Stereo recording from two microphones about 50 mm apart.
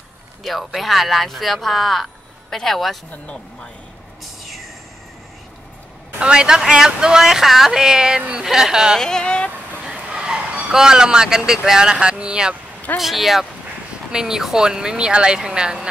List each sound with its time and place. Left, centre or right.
0.4 s speech: centre
4.2 s a sound: centre
6.1 s speech: centre
9.0 s speech: centre
9.8 s a sound: centre
13.0 s speech: centre